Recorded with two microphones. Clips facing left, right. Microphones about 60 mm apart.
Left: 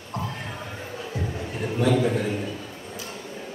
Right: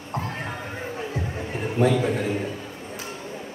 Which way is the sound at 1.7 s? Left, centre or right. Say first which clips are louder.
Right 1 dB; right.